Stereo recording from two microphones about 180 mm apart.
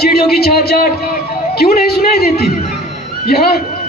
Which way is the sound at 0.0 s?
60° left (ahead or behind).